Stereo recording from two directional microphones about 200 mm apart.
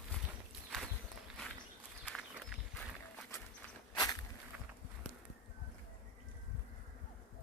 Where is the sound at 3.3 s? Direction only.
15° left (ahead or behind).